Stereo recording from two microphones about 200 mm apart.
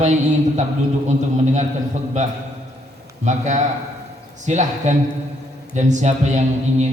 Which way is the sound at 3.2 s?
35° right (ahead or behind).